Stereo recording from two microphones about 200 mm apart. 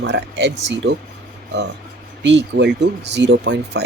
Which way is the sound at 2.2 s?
60° right (ahead or behind).